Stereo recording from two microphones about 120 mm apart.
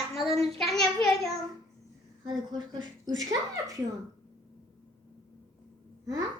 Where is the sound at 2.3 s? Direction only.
35° right (ahead or behind).